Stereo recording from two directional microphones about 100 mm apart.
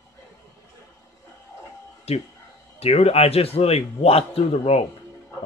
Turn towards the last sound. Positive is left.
turn(degrees=85)